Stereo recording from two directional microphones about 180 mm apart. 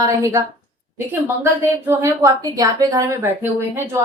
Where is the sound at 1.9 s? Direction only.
15° right (ahead or behind).